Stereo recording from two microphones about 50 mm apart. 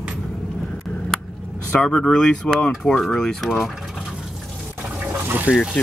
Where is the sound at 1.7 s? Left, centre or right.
Left.